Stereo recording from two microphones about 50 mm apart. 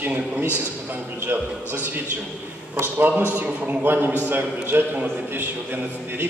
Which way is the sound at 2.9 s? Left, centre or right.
Right.